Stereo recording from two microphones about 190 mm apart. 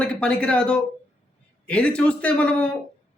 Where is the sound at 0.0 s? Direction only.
5° left (ahead or behind).